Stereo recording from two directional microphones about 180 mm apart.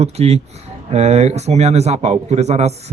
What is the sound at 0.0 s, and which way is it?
Speech, 35° right (ahead or behind).